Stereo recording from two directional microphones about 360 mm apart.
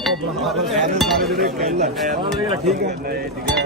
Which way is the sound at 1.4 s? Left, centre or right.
Right.